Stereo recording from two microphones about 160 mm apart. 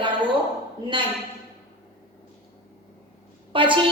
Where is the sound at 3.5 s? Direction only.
30° right (ahead or behind).